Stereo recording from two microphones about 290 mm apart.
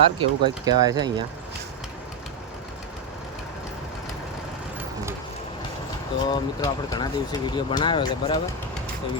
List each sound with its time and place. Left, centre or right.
0.2 s speech: centre
6.2 s speech: centre